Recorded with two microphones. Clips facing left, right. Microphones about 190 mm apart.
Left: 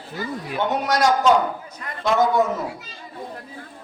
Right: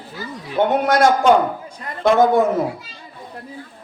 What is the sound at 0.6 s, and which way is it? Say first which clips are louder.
A man's voice: right 5 dB; 55° right (ahead or behind).